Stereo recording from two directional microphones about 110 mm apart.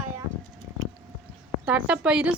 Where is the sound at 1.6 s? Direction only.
10° right (ahead or behind).